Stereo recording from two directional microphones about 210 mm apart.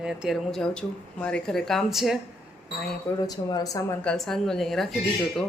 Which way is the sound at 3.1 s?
10° left (ahead or behind).